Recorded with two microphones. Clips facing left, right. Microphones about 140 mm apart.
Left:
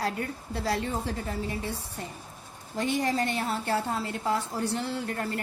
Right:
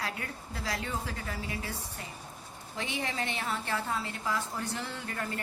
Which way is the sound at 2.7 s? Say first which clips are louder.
Left 8 dB; 40° left (ahead or behind).